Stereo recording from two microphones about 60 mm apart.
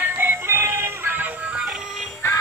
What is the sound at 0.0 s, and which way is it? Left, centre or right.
Music, right.